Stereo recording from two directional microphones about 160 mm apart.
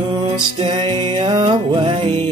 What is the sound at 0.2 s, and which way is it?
Music, 30° right (ahead or behind).